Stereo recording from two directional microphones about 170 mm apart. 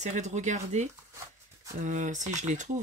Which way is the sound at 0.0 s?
45° right (ahead or behind).